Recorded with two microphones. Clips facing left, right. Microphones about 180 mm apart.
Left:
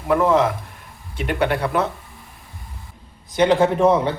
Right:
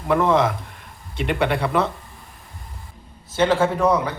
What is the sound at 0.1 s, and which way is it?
Speech, 5° left (ahead or behind).